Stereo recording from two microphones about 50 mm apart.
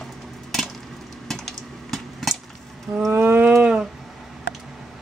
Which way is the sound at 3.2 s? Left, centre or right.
Right.